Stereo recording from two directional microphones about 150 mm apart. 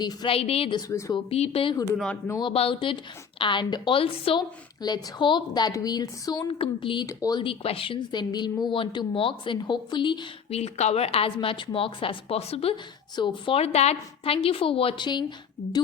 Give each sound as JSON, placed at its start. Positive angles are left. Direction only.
{"t": 0.0, "sound": "a woman's voice", "side_deg": 30}
{"t": 0.3, "sound": "a woman's voice", "side_deg": 40}
{"t": 0.8, "sound": "a woman's voice", "side_deg": 20}
{"t": 1.1, "sound": "a woman's voice", "side_deg": 40}
{"t": 1.8, "sound": "speech", "side_deg": 10}
{"t": 2.4, "sound": "a woman's voice", "side_deg": 40}
{"t": 6.5, "sound": "a woman's voice", "side_deg": 35}
{"t": 10.6, "sound": "a woman's voice", "side_deg": 45}